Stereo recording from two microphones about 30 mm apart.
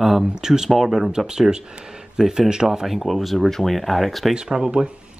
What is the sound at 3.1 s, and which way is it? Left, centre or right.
Speech, centre.